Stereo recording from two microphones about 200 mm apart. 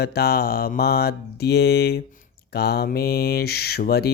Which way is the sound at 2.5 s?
55° left (ahead or behind).